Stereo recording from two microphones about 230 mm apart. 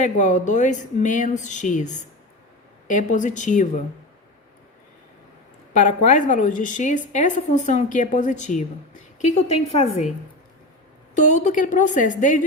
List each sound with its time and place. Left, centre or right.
0.0 s a woman's voice: left
5.7 s a woman's voice: left
11.1 s a woman's voice: left